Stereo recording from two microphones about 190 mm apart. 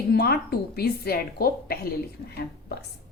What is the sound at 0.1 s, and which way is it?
A woman's voice, 55° left (ahead or behind).